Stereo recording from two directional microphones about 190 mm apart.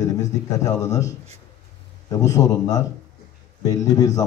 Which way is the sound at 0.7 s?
20° left (ahead or behind).